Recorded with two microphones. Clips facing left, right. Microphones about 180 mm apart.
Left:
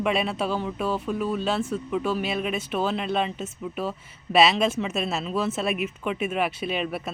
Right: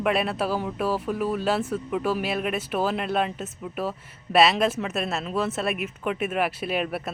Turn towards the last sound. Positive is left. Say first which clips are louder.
# right 1 dB
turn(degrees=-5)  # may be behind; listen again after turning